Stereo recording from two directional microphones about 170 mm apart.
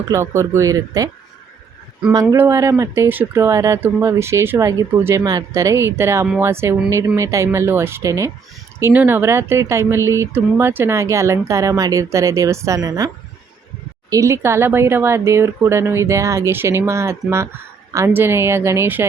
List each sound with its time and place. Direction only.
0.1 s speech: 15° right (ahead or behind)
2.3 s speech: 20° right (ahead or behind)
14.1 s speech: 20° right (ahead or behind)